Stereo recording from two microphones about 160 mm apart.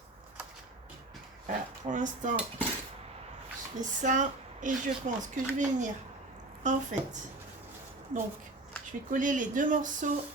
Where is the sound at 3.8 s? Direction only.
50° right (ahead or behind).